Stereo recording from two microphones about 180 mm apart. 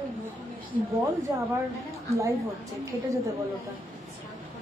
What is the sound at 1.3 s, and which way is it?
Speech, 20° right (ahead or behind).